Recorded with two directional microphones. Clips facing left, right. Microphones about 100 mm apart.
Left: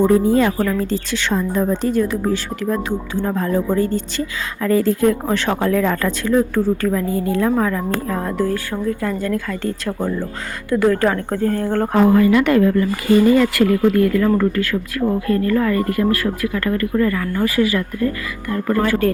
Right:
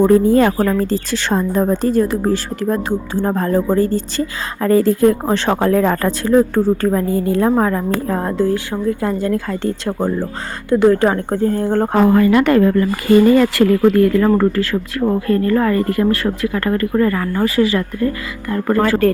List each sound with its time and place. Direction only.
0.0 s a woman's voice: 45° right (ahead or behind)
8.5 s speech: 20° right (ahead or behind)
12.1 s speech: 45° right (ahead or behind)
13.5 s a woman's voice: 35° right (ahead or behind)